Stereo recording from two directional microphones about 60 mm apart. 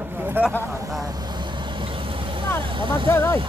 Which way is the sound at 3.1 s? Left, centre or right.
Left.